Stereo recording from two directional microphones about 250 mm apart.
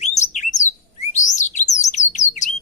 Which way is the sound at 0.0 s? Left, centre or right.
Left.